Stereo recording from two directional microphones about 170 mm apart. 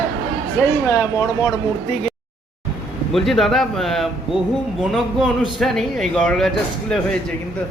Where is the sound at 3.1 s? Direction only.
Centre (ahead or behind).